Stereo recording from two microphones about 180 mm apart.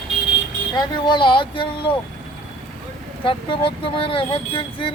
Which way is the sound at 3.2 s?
30° left (ahead or behind).